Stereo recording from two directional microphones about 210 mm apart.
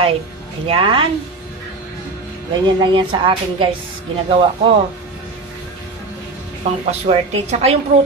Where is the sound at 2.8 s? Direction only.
20° right (ahead or behind).